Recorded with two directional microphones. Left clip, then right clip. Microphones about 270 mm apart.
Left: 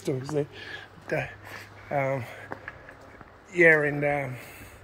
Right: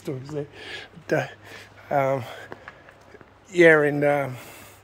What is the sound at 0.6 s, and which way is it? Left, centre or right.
Speech, right.